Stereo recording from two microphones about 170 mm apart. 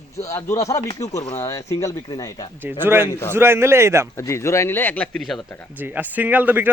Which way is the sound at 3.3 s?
15° right (ahead or behind).